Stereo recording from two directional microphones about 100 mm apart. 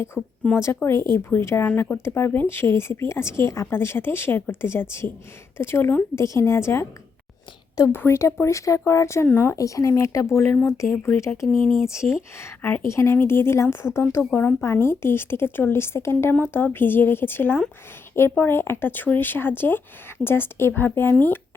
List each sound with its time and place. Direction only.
0.5 s speech: 25° left (ahead or behind)
7.9 s speech: 25° left (ahead or behind)
9.6 s speech: 35° left (ahead or behind)
10.9 s speech: 20° left (ahead or behind)
12.4 s speech: 25° left (ahead or behind)